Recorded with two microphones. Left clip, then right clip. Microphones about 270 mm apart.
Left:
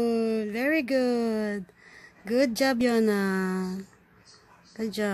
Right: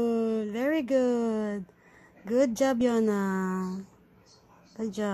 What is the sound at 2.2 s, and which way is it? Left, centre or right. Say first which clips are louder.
Speech: left 1 dB; centre.